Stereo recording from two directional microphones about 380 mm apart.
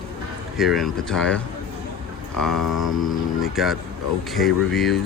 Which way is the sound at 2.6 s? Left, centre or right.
Left.